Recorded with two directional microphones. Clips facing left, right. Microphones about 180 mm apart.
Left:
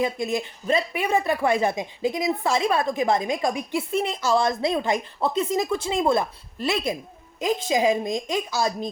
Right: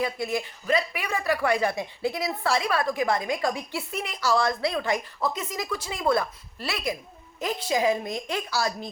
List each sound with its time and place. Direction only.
0.0 s a woman's voice: 20° left (ahead or behind)